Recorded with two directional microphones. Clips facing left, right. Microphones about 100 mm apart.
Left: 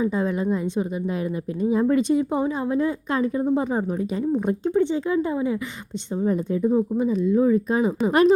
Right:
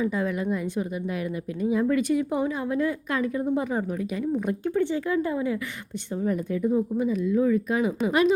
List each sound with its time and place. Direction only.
0.0 s speech: 25° left (ahead or behind)
8.0 s speech: 40° left (ahead or behind)